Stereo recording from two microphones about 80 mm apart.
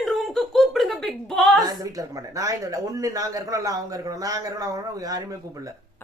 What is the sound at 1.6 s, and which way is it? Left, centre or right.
Speech, right.